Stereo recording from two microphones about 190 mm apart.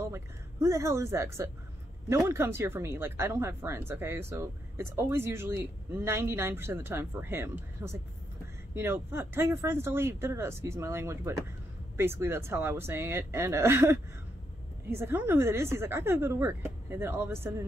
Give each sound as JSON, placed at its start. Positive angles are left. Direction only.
{"t": 0.0, "sound": "a woman's voice", "side_deg": -15}